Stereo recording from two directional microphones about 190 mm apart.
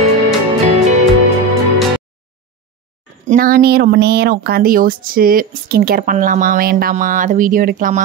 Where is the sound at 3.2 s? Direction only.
45° right (ahead or behind).